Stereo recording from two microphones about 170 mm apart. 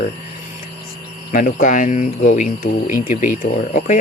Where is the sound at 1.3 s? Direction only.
50° left (ahead or behind).